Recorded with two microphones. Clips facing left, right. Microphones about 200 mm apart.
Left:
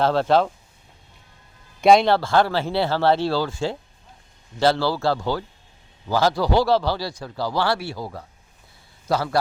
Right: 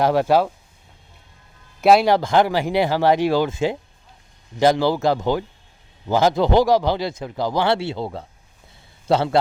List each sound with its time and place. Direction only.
0.0 s speech: 15° right (ahead or behind)
1.8 s speech: 5° right (ahead or behind); by 9.4 s 25° right (ahead or behind)